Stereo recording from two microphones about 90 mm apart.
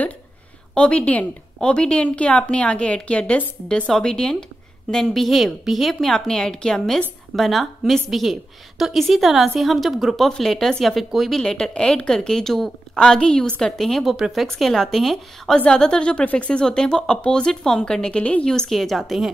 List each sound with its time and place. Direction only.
0.7 s a woman's voice: 10° left (ahead or behind)
18.7 s a woman's voice: centre (ahead or behind)